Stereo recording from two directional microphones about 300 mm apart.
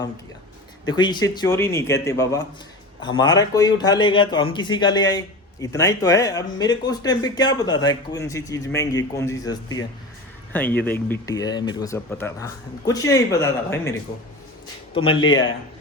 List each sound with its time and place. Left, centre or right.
0.9 s speech: centre
14.9 s speech: centre